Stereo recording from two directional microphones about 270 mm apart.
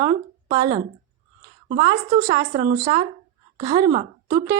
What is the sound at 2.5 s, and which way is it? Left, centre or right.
Speech, right.